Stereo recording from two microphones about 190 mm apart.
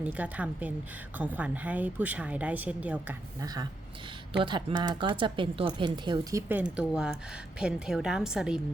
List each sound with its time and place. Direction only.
0.0 s a woman's voice: 5° right (ahead or behind)
3.4 s speech: 20° right (ahead or behind)
6.5 s a woman's voice: 5° right (ahead or behind)